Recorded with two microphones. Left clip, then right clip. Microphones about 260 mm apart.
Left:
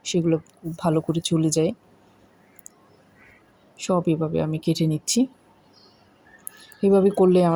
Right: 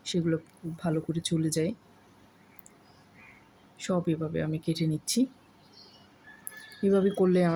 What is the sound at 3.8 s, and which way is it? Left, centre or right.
Speech, centre.